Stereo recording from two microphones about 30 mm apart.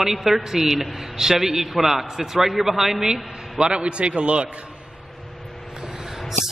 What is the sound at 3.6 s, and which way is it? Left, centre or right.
Speech, right.